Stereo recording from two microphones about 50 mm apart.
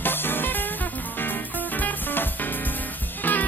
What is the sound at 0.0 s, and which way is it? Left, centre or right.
Music, left.